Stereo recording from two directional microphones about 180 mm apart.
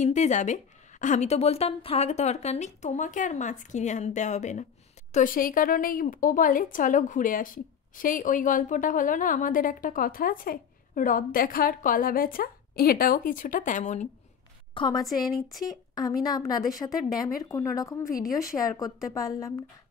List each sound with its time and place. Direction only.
0.0 s a woman's voice: 40° left (ahead or behind)
14.7 s a woman's voice: 25° left (ahead or behind)
16.2 s a woman's voice: 20° left (ahead or behind)